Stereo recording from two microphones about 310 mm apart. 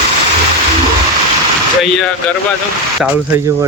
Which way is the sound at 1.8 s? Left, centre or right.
Centre.